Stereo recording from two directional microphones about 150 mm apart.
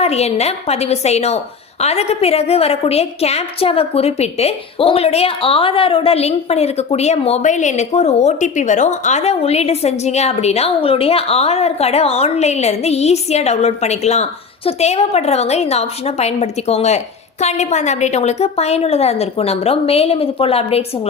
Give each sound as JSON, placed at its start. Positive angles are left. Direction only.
{"t": 0.0, "sound": "a woman's voice", "side_deg": 45}